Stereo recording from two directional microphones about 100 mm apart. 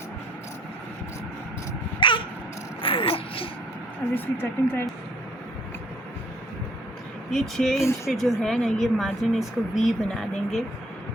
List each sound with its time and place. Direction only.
2.0 s a sound: 55° left (ahead or behind)
4.1 s speech: 20° left (ahead or behind)
7.3 s speech: centre (ahead or behind)